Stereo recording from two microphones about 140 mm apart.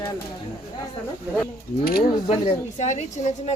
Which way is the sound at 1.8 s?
90° left.